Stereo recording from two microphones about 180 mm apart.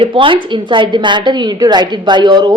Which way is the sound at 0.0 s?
30° right (ahead or behind).